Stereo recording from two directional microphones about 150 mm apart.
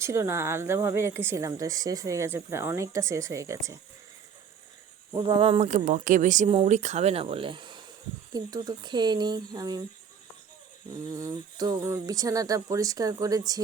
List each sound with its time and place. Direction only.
0.0 s speech: 20° right (ahead or behind)
5.1 s speech: 35° right (ahead or behind)
5.5 s speech: 55° right (ahead or behind); by 9.8 s 25° right (ahead or behind)
11.1 s speech: 25° right (ahead or behind)